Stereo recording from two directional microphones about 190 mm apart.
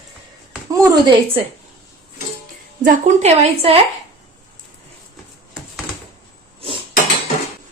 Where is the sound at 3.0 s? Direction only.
35° right (ahead or behind).